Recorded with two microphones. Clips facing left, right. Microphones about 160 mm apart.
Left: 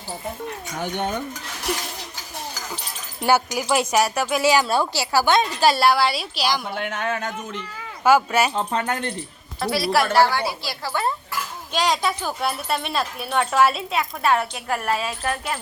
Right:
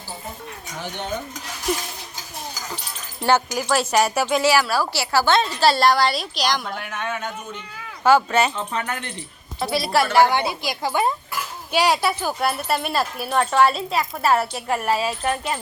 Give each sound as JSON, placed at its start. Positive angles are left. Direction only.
{"t": 0.8, "sound": "dishes", "side_deg": 55}
{"t": 3.2, "sound": "a woman's voice", "side_deg": 10}
{"t": 4.4, "sound": "a woman's voice", "side_deg": 20}
{"t": 8.0, "sound": "a woman's voice", "side_deg": 10}
{"t": 8.5, "sound": "speech", "side_deg": 35}
{"t": 9.6, "sound": "speech", "side_deg": 0}
{"t": 10.1, "sound": "a woman's voice", "side_deg": -15}